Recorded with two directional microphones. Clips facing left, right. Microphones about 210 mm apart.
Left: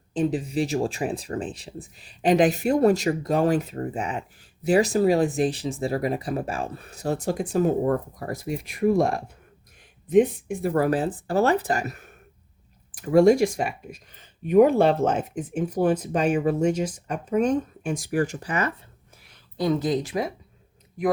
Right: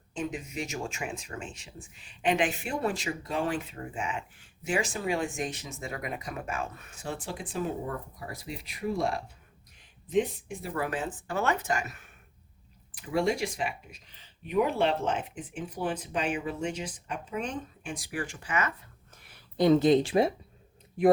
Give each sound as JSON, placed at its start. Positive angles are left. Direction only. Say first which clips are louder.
{"t": 0.1, "sound": "speech", "louder": "left 10 dB", "side_deg": 35}
{"t": 19.5, "sound": "speech", "louder": "right 2 dB", "side_deg": -25}